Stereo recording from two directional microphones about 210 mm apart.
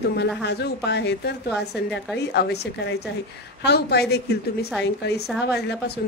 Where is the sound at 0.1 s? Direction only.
55° left (ahead or behind).